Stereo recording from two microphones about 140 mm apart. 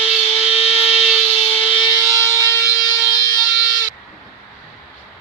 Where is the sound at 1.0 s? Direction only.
5° right (ahead or behind).